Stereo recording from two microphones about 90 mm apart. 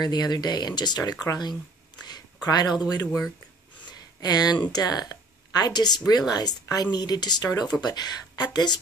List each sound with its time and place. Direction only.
0.0 s a woman's voice: 50° left (ahead or behind)